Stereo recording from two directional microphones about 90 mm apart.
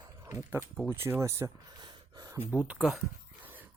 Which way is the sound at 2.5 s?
15° right (ahead or behind).